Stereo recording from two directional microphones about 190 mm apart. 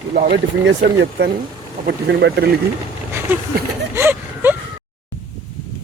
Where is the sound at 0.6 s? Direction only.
65° right (ahead or behind).